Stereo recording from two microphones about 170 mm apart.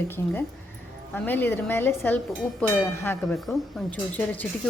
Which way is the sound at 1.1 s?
10° left (ahead or behind).